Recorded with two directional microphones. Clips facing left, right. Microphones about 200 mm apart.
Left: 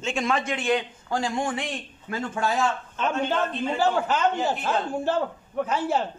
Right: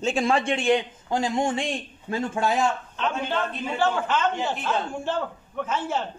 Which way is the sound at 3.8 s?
40° left (ahead or behind).